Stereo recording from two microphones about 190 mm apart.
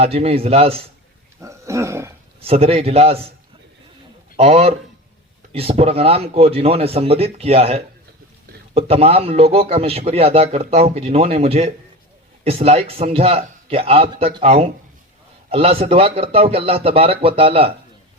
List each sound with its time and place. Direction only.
0.0 s a man's voice: 30° right (ahead or behind)
1.4 s dog: 15° right (ahead or behind)
2.4 s a man's voice: 30° right (ahead or behind)
4.4 s a man's voice: 30° right (ahead or behind)